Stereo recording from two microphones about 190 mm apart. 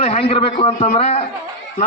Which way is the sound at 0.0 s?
30° left (ahead or behind).